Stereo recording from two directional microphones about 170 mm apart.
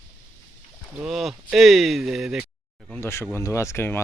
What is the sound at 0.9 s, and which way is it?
Speech, centre (ahead or behind).